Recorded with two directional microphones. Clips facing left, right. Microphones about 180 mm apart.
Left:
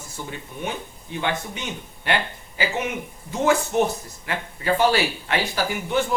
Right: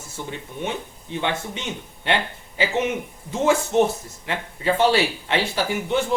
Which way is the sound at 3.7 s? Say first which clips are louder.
Right 3 dB; 25° right (ahead or behind).